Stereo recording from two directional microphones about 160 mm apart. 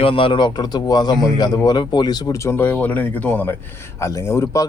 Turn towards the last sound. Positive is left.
turn(degrees=20)  # may be behind; listen again after turning